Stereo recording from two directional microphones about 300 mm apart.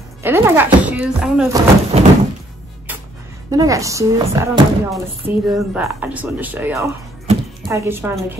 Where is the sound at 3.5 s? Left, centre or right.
Centre.